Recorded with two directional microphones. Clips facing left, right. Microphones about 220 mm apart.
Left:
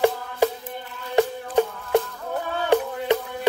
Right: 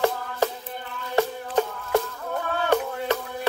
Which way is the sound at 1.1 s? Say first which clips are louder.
Left 3 dB; 15° left (ahead or behind).